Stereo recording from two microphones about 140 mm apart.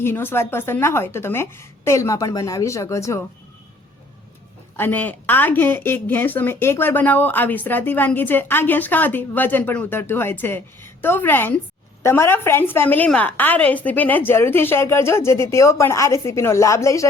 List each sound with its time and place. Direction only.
0.0 s speech: 15° left (ahead or behind)
4.8 s speech: 10° left (ahead or behind)